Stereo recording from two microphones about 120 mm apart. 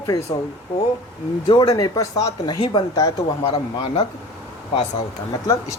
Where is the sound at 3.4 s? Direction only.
50° left (ahead or behind).